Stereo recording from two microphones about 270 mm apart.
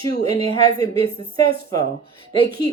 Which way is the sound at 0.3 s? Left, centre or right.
Centre.